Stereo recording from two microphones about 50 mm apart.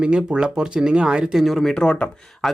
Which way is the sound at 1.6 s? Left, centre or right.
Centre.